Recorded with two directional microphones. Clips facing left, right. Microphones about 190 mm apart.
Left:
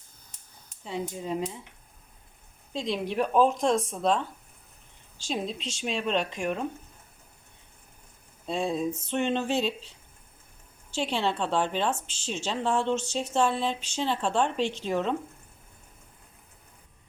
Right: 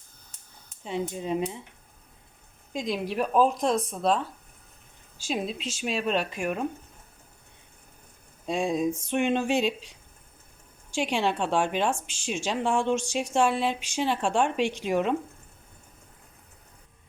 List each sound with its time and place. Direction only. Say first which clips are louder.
0.9 s speech: right 3 dB; 20° right (ahead or behind)
2.7 s a woman's voice: even; 5° right (ahead or behind)
8.4 s a woman's voice: right 2 dB; 10° right (ahead or behind)
10.9 s a woman's voice: right 2 dB; 10° right (ahead or behind)